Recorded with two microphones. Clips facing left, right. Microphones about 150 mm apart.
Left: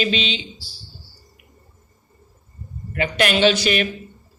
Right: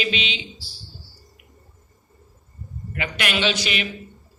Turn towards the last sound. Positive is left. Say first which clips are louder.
# left 7 dB
turn(degrees=45)  # may be behind; listen again after turning